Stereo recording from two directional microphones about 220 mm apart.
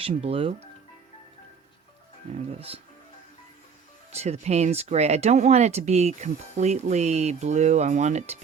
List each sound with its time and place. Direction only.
0.0 s speech: 25° right (ahead or behind)
2.6 s speech: 25° right (ahead or behind)
4.1 s speech: 30° right (ahead or behind)